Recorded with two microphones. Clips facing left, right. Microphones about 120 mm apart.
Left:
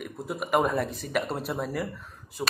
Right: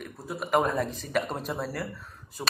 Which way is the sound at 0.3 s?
10° left (ahead or behind).